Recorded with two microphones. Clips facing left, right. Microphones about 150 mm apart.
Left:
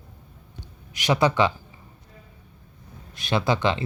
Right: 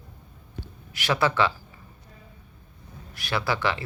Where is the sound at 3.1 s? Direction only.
20° left (ahead or behind).